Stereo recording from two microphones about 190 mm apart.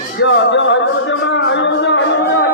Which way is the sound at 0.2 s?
70° left (ahead or behind).